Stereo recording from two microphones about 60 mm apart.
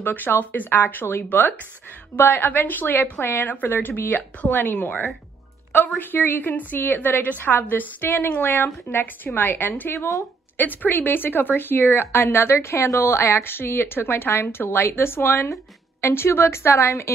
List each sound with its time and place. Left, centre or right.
0.0 s a woman's voice: left